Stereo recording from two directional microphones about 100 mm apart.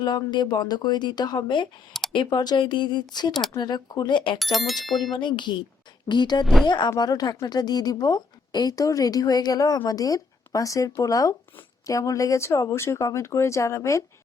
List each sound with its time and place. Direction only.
0.3 s speech: 45° left (ahead or behind)
4.5 s speech: centre (ahead or behind)
5.1 s speech: 50° left (ahead or behind)
6.4 s speech: centre (ahead or behind)
6.7 s a woman's voice: 45° left (ahead or behind); by 14.0 s 30° left (ahead or behind)